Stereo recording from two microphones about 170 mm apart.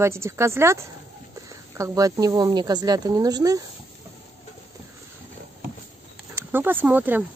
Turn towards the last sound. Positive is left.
turn(degrees=-10)  # may be behind; listen again after turning